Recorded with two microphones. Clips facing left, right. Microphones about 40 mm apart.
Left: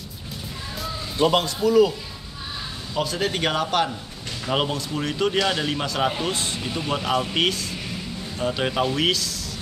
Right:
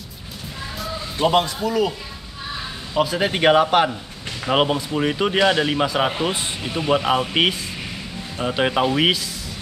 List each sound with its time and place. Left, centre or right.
1.1 s speech: centre
2.9 s speech: centre